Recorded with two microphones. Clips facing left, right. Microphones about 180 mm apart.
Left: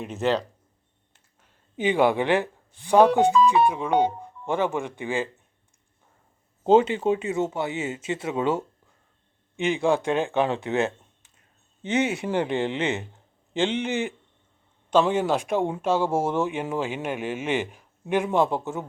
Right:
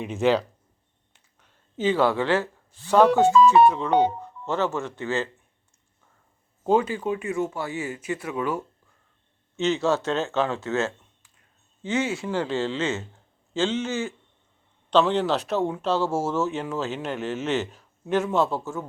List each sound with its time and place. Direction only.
0.0 s speech: centre (ahead or behind)
1.4 s speech: 15° left (ahead or behind)
6.7 s speech: 25° left (ahead or behind)
9.6 s a man's voice: 15° left (ahead or behind)